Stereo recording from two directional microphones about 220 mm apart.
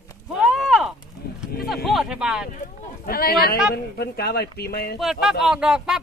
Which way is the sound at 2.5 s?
40° left (ahead or behind).